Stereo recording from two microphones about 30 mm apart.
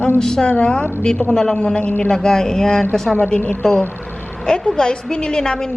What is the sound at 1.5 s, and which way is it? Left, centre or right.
Speech, left.